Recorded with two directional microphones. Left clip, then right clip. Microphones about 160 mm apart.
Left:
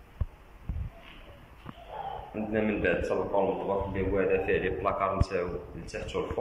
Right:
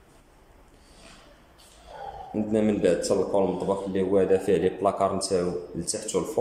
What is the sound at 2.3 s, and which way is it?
A man's voice, 30° right (ahead or behind).